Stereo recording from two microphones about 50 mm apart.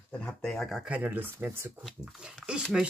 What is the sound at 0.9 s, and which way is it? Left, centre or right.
Speech, right.